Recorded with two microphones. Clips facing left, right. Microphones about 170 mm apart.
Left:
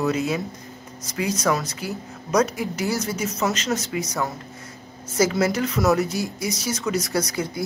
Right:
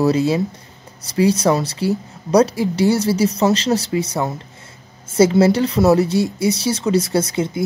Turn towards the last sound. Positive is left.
turn(degrees=-25)  # may be behind; listen again after turning